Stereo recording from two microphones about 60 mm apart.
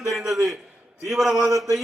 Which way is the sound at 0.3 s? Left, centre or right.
Right.